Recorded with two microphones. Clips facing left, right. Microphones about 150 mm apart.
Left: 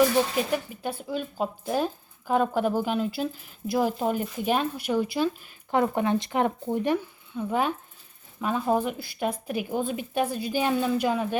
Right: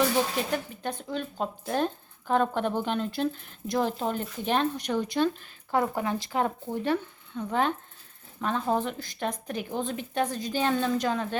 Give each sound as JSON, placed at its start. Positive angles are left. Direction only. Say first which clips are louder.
{"t": 0.5, "sound": "speech", "louder": "left 2 dB", "side_deg": 5}
{"t": 5.7, "sound": "speech", "louder": "left 3 dB", "side_deg": 20}